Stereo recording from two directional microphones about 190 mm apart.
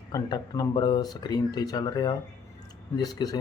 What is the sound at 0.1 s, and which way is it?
Speech, 20° left (ahead or behind).